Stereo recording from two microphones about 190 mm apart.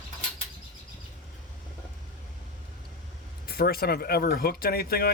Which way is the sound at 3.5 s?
55° left (ahead or behind).